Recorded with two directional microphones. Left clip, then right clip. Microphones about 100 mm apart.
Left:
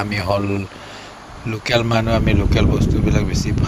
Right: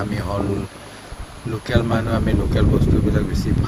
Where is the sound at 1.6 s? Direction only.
60° left (ahead or behind).